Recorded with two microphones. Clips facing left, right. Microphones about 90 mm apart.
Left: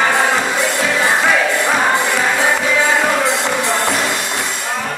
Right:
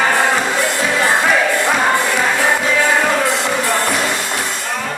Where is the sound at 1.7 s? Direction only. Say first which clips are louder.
Even; 5° right (ahead or behind).